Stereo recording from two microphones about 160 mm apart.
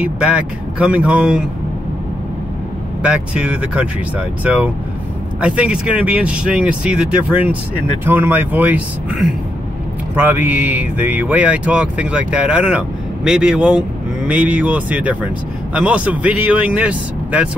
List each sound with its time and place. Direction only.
0.0 s speech: 5° right (ahead or behind)
3.0 s speech: 5° right (ahead or behind)
10.1 s speech: 10° right (ahead or behind)